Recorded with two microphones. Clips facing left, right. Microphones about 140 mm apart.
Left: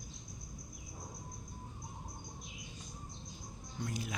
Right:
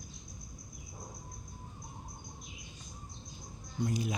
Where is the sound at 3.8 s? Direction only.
20° right (ahead or behind).